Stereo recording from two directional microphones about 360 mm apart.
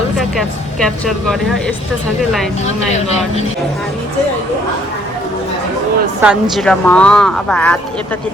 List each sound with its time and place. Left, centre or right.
0.2 s speech: centre
2.6 s speech: centre
6.2 s speech: centre